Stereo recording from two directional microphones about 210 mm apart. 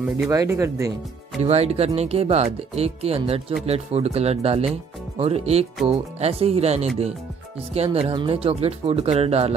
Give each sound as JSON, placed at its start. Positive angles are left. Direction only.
{"t": 0.3, "sound": "speech", "side_deg": -15}
{"t": 1.4, "sound": "speech", "side_deg": -30}